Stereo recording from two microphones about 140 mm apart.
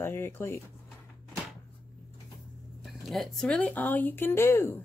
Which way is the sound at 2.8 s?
Centre (ahead or behind).